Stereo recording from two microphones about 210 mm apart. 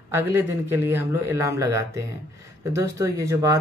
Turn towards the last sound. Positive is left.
turn(degrees=-15)  # may be behind; listen again after turning